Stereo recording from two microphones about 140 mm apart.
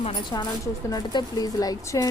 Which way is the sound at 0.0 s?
35° left (ahead or behind).